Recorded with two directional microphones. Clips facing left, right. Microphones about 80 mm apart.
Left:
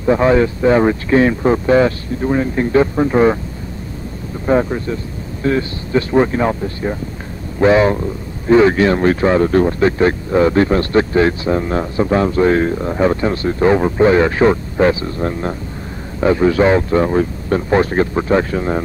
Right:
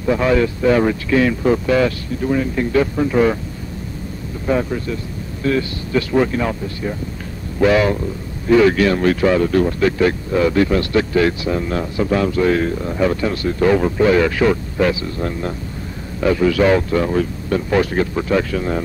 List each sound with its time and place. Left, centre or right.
0.0 s speech: left
4.5 s speech: left